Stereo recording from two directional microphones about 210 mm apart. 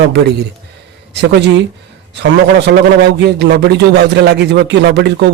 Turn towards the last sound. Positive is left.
turn(degrees=-55)  # may be behind; listen again after turning